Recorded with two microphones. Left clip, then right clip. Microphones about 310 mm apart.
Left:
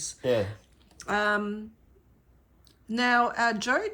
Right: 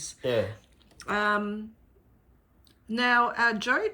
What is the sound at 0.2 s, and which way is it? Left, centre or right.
Speech, left.